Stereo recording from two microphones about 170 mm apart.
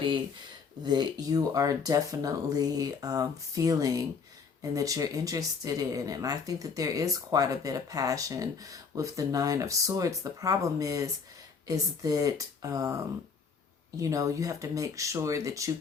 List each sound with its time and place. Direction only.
0.9 s speech: 25° right (ahead or behind)
14.0 s speech: 20° right (ahead or behind)